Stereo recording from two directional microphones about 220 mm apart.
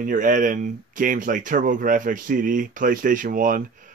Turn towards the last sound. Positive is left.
turn(degrees=-40)  # may be behind; listen again after turning